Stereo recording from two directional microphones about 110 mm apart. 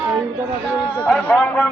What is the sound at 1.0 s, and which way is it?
Speech, 15° left (ahead or behind).